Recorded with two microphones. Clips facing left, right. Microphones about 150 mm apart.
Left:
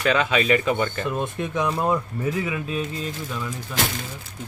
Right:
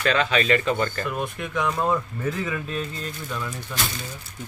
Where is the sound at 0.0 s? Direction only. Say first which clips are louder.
Left 1 dB; 15° left (ahead or behind).